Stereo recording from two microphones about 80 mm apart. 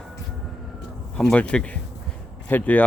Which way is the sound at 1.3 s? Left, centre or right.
Centre.